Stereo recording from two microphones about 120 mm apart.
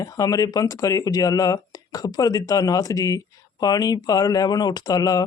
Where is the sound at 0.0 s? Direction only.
30° left (ahead or behind).